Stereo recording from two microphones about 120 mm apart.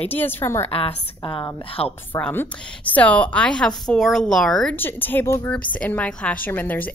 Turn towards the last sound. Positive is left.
turn(degrees=15)  # may be behind; listen again after turning